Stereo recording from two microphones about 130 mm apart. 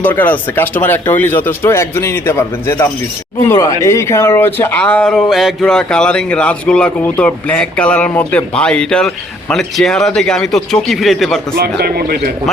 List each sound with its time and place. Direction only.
0.0 s speech: 15° left (ahead or behind)